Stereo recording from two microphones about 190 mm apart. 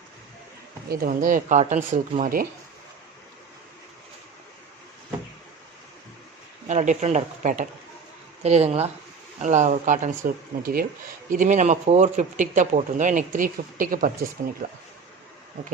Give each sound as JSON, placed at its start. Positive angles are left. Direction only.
{"t": 0.9, "sound": "speech", "side_deg": -45}
{"t": 6.7, "sound": "speech", "side_deg": -40}